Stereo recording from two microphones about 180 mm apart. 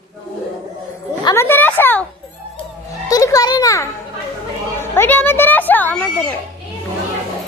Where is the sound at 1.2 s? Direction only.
15° left (ahead or behind).